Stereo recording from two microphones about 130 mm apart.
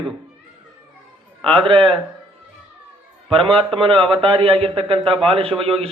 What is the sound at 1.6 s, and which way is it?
Speech, 40° right (ahead or behind).